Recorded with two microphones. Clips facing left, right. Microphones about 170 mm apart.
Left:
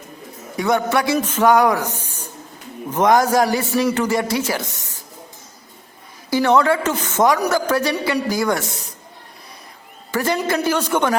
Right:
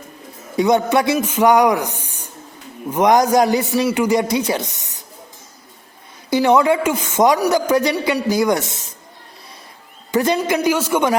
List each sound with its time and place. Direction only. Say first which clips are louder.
0.5 s a man's voice: right 3 dB; 20° right (ahead or behind)
6.3 s speech: right 2 dB; 15° right (ahead or behind)
10.1 s speech: right 3 dB; 20° right (ahead or behind)